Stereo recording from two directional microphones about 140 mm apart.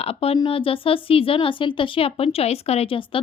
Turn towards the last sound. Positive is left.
turn(degrees=40)  # may be behind; listen again after turning